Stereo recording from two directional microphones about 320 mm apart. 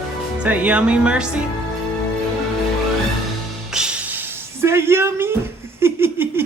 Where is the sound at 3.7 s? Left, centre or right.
Centre.